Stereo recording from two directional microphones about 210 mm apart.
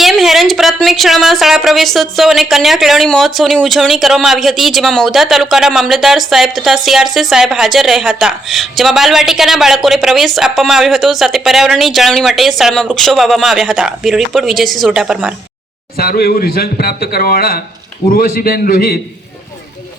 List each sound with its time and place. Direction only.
0.0 s speech: centre (ahead or behind)
16.0 s a man's voice: 45° left (ahead or behind)